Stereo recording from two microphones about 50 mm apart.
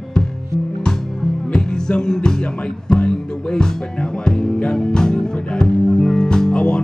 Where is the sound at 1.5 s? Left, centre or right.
Centre.